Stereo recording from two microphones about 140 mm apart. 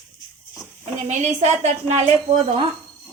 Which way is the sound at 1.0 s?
55° right (ahead or behind).